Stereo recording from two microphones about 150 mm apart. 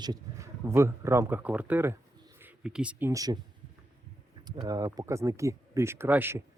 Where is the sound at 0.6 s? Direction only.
15° right (ahead or behind).